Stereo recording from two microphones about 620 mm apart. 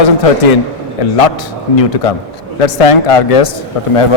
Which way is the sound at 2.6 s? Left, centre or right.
Left.